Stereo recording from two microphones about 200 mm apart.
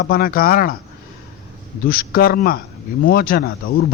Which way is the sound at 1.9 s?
45° left (ahead or behind).